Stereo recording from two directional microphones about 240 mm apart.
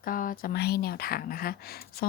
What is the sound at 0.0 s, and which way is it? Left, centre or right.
Speech, left.